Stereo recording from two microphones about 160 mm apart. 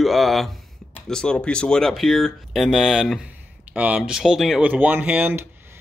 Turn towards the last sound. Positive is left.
turn(degrees=-10)  # may be behind; listen again after turning